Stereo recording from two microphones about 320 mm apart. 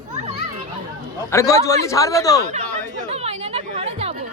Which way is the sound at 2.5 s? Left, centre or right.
Right.